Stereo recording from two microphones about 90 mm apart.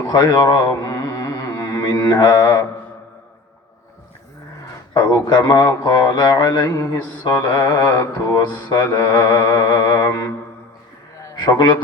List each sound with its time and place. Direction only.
0.0 s a sound: 50° left (ahead or behind)
4.7 s speech: 45° left (ahead or behind)
7.3 s mantra: 25° left (ahead or behind)
7.7 s mantra: 45° left (ahead or behind)
8.7 s speech: 50° left (ahead or behind)
11.4 s a man's voice: 55° left (ahead or behind)